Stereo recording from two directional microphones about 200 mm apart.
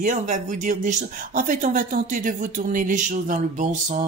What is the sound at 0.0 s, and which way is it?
Speech, 40° right (ahead or behind).